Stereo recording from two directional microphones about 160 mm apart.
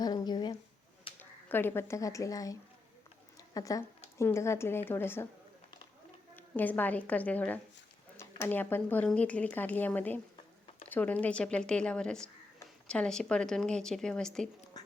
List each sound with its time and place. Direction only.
0.0 s a sound: 25° left (ahead or behind)
1.2 s a woman's voice: 15° left (ahead or behind)
6.3 s speech: 10° left (ahead or behind)